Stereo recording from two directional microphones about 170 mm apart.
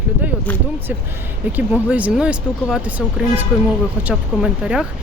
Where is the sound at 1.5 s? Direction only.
10° right (ahead or behind).